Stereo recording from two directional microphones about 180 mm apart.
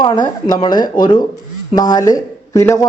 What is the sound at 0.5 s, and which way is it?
A man's voice, 25° left (ahead or behind).